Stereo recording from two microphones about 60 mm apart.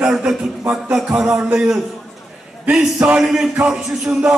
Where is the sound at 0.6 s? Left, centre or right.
Right.